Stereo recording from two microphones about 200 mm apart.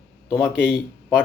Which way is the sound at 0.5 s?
5° right (ahead or behind).